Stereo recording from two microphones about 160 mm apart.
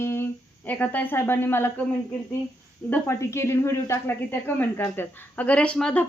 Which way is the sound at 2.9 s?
15° left (ahead or behind).